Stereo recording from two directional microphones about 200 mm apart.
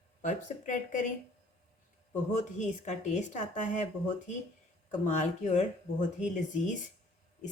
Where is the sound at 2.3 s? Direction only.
35° left (ahead or behind).